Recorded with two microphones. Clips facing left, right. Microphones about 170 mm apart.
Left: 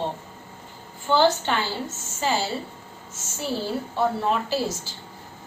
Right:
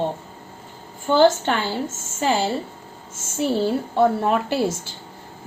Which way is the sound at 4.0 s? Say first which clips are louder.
Right 5 dB; 55° right (ahead or behind).